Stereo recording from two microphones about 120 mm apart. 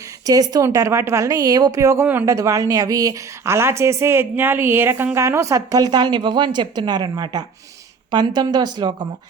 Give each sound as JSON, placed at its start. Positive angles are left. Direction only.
{"t": 0.3, "sound": "a woman's voice", "side_deg": -30}